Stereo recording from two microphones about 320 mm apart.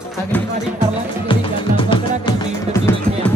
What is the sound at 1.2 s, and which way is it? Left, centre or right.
Music, centre.